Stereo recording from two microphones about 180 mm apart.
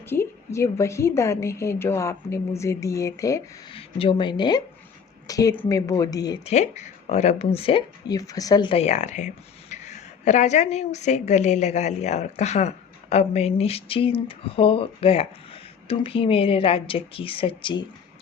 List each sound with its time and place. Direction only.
0.1 s a woman's voice: 15° left (ahead or behind)
3.7 s speech: 30° left (ahead or behind)
6.4 s speech: 40° left (ahead or behind)